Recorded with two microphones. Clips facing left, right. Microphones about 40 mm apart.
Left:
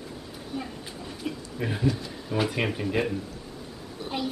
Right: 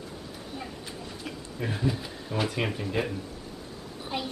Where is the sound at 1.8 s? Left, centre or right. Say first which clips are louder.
Left 3 dB; centre.